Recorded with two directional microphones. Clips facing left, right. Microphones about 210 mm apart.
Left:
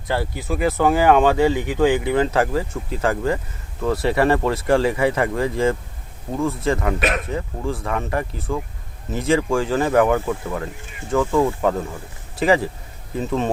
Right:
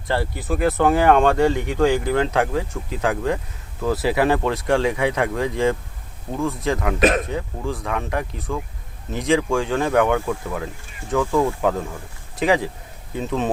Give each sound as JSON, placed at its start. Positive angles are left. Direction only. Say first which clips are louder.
{"t": 0.1, "sound": "speech", "louder": "even", "side_deg": 0}
{"t": 7.0, "sound": "a man's voice", "louder": "right 5 dB", "side_deg": -35}
{"t": 7.3, "sound": "speech", "louder": "left 1 dB", "side_deg": 0}